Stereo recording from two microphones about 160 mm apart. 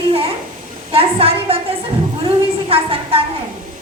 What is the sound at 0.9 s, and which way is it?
Speech, 35° right (ahead or behind).